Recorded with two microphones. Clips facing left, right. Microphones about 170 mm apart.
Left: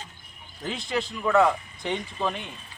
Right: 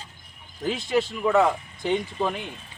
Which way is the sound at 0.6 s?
5° right (ahead or behind).